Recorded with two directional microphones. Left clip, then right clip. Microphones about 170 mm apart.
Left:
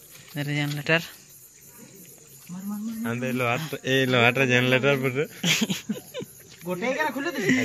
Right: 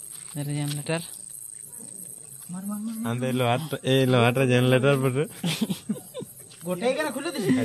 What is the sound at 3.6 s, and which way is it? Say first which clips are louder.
Speech: right 1 dB; 65° right (ahead or behind).